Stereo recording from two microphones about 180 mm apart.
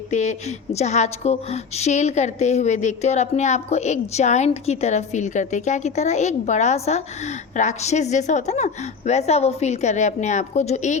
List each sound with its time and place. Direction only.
0.1 s a woman's voice: 40° left (ahead or behind)